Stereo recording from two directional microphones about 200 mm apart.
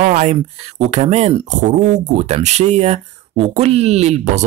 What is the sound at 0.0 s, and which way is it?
Speech, 35° right (ahead or behind).